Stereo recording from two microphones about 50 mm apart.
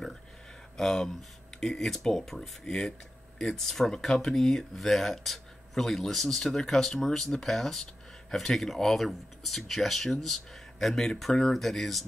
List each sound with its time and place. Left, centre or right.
0.7 s speech: centre